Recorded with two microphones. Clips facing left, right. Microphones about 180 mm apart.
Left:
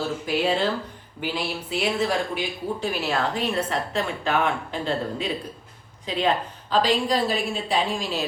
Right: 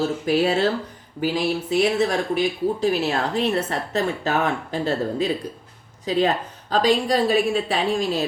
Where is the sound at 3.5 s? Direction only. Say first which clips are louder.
Right 2 dB; 40° right (ahead or behind).